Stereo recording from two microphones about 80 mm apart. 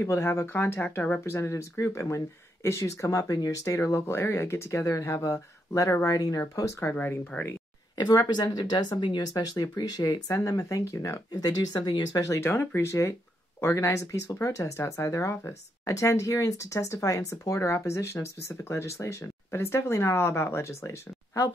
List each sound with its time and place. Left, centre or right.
0.0 s speech: left
6.8 s speech: left
8.3 s speech: left
9.3 s speech: left
11.4 s speech: left
12.2 s speech: left